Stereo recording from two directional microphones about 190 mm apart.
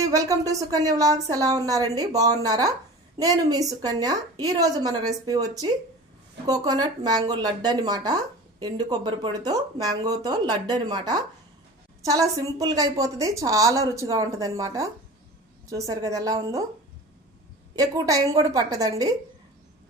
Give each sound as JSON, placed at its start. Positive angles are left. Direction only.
{"t": 0.0, "sound": "a woman's voice", "side_deg": -15}
{"t": 17.7, "sound": "speech", "side_deg": -20}